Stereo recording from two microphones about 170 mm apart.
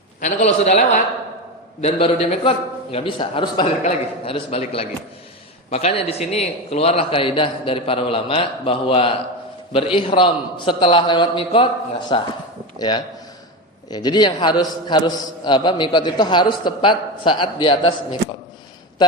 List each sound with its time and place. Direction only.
0.2 s a man's voice: 40° left (ahead or behind)